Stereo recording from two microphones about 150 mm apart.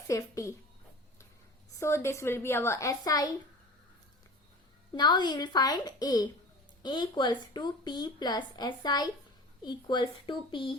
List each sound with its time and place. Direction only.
0.1 s a woman's voice: 20° left (ahead or behind)
1.7 s a woman's voice: 20° left (ahead or behind)
4.9 s a woman's voice: 30° left (ahead or behind)